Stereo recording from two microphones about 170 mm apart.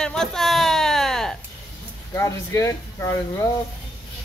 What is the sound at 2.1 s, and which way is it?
Speech, 15° left (ahead or behind).